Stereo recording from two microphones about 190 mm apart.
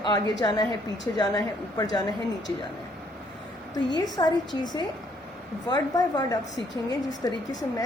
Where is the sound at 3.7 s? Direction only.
20° left (ahead or behind).